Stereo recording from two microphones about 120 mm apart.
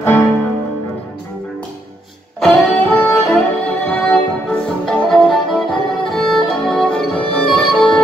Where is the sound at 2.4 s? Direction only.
5° left (ahead or behind).